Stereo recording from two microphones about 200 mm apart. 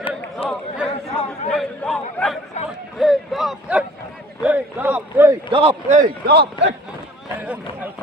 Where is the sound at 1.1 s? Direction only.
5° left (ahead or behind).